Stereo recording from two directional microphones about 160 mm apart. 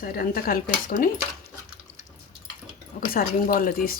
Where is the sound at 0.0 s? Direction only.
70° left (ahead or behind).